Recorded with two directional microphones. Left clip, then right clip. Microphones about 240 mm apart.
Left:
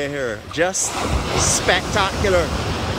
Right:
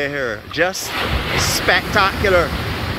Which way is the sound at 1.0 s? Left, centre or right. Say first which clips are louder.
Right 5 dB; left.